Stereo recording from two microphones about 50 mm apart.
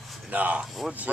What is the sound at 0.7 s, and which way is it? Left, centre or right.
Speech, centre.